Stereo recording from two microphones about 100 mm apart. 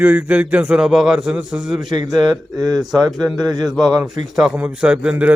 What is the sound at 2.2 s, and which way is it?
Speech, 45° right (ahead or behind).